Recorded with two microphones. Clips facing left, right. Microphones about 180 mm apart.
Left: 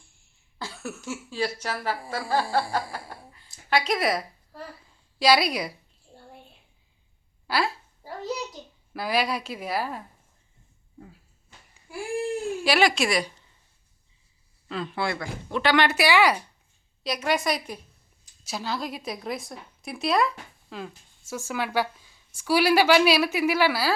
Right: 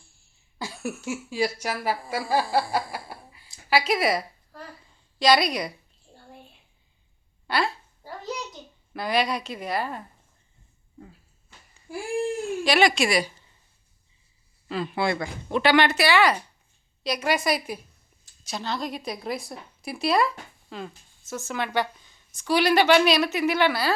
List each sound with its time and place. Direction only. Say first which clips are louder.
0.6 s a woman's voice: right 4 dB; 10° right (ahead or behind); by 5.7 s 5° left (ahead or behind)
7.4 s a sound: even; 5° left (ahead or behind)
8.9 s a woman's voice: right 1 dB; 5° left (ahead or behind)
12.6 s a woman's voice: right 1 dB; 5° left (ahead or behind)
14.7 s speech: right 3 dB; 5° right (ahead or behind)
14.9 s speech: right 4 dB; 20° right (ahead or behind)
15.7 s a woman's voice: right 1 dB; centre (ahead or behind)
16.0 s speech: even; 10° left (ahead or behind)
17.0 s a woman's voice: right 1 dB; centre (ahead or behind)